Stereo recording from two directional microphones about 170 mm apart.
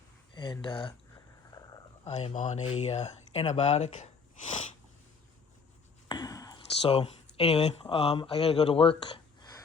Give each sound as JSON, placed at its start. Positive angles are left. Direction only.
{"t": 0.3, "sound": "speech", "side_deg": 30}
{"t": 2.0, "sound": "speech", "side_deg": 40}
{"t": 6.1, "sound": "a sound", "side_deg": 20}
{"t": 7.3, "sound": "speech", "side_deg": 35}